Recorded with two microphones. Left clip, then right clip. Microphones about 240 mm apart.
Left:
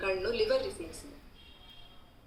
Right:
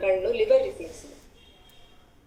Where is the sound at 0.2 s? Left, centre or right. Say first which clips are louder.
Right 6 dB; left.